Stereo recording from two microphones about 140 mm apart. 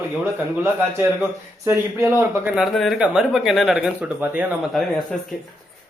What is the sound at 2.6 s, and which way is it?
Speech, centre (ahead or behind).